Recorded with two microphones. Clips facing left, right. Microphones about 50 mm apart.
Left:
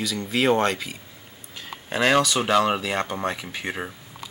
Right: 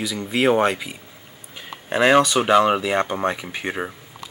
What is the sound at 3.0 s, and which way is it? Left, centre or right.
Speech, right.